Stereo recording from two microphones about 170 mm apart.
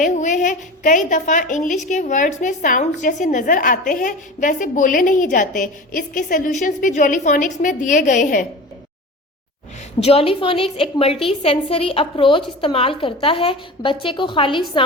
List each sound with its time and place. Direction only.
0.0 s a woman's voice: 45° left (ahead or behind)
10.0 s a woman's voice: 35° left (ahead or behind)